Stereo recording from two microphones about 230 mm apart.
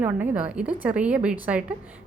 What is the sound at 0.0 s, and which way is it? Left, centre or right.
A woman's voice, centre.